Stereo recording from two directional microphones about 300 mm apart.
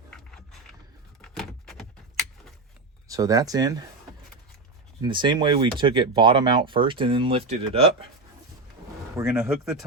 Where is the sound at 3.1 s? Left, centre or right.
Centre.